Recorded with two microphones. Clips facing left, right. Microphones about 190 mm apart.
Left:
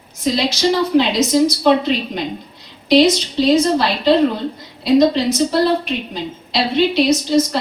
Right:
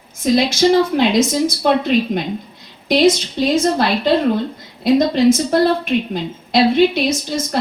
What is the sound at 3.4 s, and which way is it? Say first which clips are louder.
Speech: left 3 dB; 50° right (ahead or behind).